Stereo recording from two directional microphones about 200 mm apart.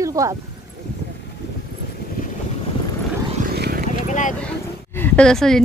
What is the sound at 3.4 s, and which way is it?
Vehicle, 50° right (ahead or behind).